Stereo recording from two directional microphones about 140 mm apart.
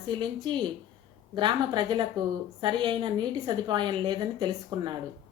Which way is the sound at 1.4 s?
35° right (ahead or behind).